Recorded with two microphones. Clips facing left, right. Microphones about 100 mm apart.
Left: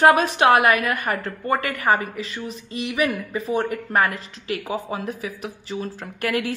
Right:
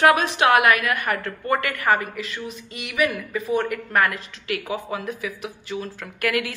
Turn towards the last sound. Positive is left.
turn(degrees=35)  # may be behind; listen again after turning